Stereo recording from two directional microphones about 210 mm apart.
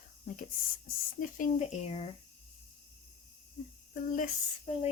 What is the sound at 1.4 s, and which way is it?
Speech, 30° left (ahead or behind).